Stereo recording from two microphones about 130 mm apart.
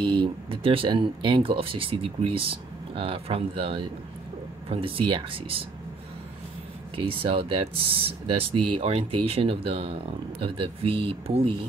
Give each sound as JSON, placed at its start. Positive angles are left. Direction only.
{"t": 0.0, "sound": "speech", "side_deg": -40}
{"t": 7.0, "sound": "speech", "side_deg": -40}